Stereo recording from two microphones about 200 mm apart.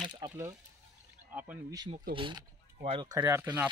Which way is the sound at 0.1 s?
20° right (ahead or behind).